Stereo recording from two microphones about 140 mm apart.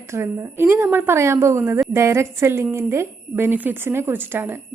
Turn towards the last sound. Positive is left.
turn(degrees=-15)  # may be behind; listen again after turning